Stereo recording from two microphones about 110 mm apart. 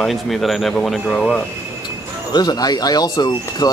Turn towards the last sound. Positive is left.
turn(degrees=40)  # may be behind; listen again after turning